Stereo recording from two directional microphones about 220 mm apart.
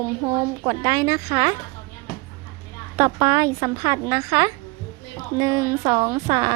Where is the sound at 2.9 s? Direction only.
15° right (ahead or behind).